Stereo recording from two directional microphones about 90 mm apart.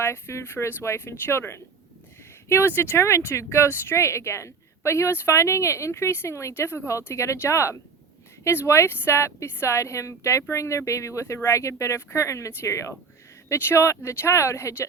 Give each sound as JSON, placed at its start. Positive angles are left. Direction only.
{"t": 0.0, "sound": "speech", "side_deg": 30}